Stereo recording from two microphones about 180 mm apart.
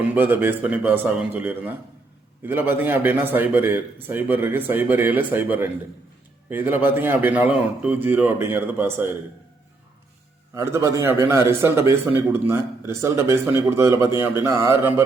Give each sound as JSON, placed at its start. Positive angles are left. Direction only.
{"t": 0.1, "sound": "a man's voice", "side_deg": -10}
{"t": 10.5, "sound": "a man's voice", "side_deg": -15}